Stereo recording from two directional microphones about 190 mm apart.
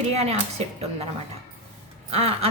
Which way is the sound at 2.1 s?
30° right (ahead or behind).